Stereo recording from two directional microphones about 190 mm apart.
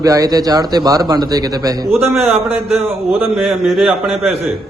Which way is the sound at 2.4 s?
Centre (ahead or behind).